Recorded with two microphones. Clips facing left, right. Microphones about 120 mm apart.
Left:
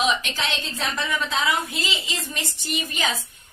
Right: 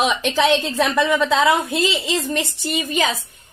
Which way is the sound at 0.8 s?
70° right (ahead or behind).